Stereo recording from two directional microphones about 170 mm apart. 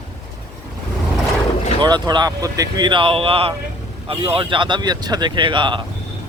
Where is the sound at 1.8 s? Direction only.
25° right (ahead or behind).